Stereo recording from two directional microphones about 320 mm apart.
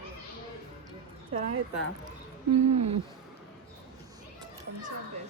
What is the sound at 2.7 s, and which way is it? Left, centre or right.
Speech, right.